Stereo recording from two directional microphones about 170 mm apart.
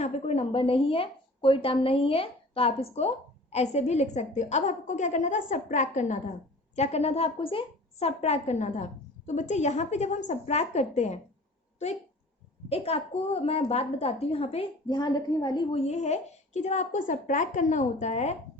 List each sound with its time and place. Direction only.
0.0 s a woman's voice: 40° left (ahead or behind)
12.6 s a woman's voice: 35° left (ahead or behind)
15.7 s a woman's voice: 40° left (ahead or behind)